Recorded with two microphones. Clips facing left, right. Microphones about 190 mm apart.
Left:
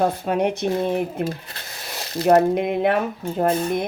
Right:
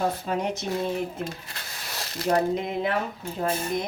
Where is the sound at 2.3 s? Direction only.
60° left (ahead or behind).